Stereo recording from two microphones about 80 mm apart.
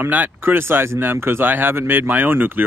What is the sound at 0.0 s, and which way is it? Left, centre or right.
Speech, right.